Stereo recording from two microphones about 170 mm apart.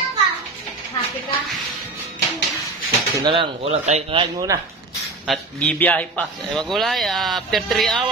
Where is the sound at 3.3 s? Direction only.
40° right (ahead or behind).